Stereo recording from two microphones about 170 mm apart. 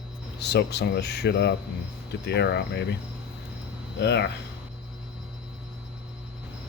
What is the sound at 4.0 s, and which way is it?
Speech, 80° left.